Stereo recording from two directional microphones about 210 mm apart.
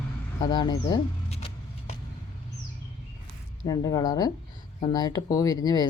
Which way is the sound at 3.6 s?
15° left (ahead or behind).